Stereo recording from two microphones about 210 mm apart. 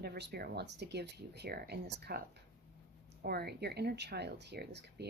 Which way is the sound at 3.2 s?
50° right (ahead or behind).